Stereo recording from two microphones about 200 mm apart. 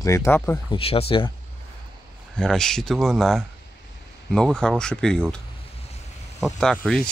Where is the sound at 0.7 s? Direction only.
30° left (ahead or behind).